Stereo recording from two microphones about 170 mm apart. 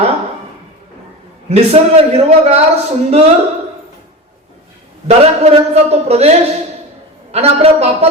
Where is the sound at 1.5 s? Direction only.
40° right (ahead or behind).